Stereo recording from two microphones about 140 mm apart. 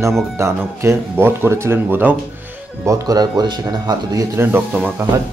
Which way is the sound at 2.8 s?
25° right (ahead or behind).